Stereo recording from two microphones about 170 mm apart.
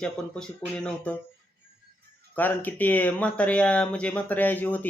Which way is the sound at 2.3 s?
10° left (ahead or behind).